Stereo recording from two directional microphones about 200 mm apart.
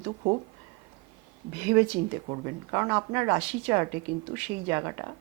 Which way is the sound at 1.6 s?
10° right (ahead or behind).